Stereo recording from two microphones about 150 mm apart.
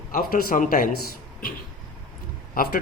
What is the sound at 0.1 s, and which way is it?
Speech, 75° left (ahead or behind).